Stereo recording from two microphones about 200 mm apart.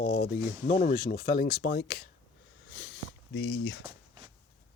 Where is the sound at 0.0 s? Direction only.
65° left (ahead or behind).